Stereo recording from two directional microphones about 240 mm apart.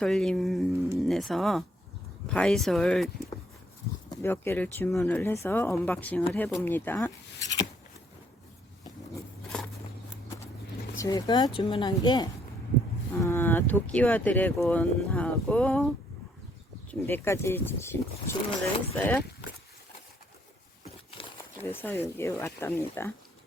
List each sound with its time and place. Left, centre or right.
0.0 s speech: centre
9.1 s a sound: centre
10.9 s speech: centre
16.9 s speech: centre
20.8 s a sound: left
21.6 s speech: centre